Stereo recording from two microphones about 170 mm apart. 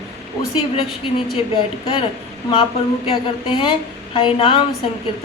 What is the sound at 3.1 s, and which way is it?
A woman's voice, 30° left (ahead or behind).